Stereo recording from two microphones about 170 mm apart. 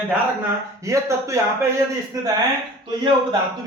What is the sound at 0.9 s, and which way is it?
Speech, 15° right (ahead or behind).